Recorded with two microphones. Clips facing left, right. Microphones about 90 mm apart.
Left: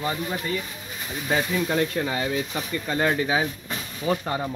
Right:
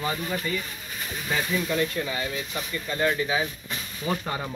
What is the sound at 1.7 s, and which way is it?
Speech, 55° left (ahead or behind).